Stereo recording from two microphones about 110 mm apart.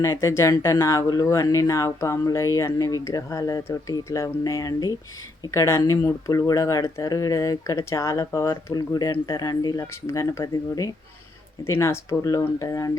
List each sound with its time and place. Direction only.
0.0 s speech: 25° left (ahead or behind)